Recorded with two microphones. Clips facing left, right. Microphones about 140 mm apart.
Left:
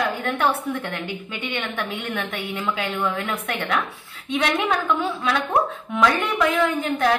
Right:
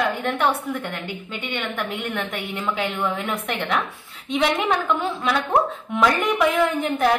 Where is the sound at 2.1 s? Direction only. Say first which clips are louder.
Even; 5° left (ahead or behind).